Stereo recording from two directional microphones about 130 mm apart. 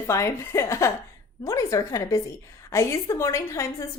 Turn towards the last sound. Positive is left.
turn(degrees=20)  # may be behind; listen again after turning